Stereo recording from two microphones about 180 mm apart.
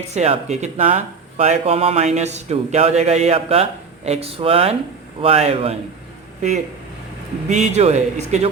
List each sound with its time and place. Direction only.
0.1 s speech: 40° right (ahead or behind)
7.5 s speech: 40° right (ahead or behind)